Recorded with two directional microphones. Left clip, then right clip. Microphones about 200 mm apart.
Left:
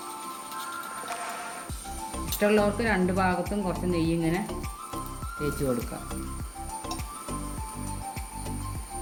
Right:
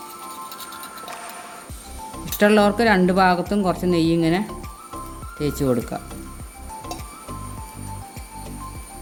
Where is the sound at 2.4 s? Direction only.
60° right (ahead or behind).